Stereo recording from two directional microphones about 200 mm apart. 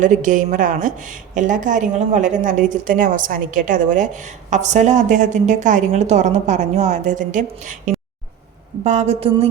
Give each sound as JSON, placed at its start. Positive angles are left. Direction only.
{"t": 0.0, "sound": "a woman's voice", "side_deg": -40}